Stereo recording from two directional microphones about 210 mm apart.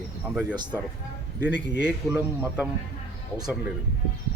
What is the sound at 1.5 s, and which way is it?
Speech, 55° left (ahead or behind).